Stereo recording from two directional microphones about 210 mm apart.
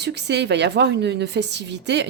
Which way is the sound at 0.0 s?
55° right (ahead or behind).